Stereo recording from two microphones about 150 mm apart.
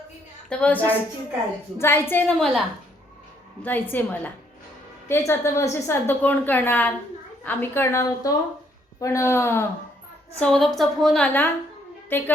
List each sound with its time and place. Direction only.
0.5 s a woman's voice: 10° left (ahead or behind)
3.6 s a woman's voice: 10° left (ahead or behind)
10.4 s a woman's voice: 5° left (ahead or behind)